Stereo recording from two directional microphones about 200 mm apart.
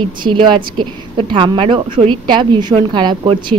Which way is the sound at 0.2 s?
25° right (ahead or behind).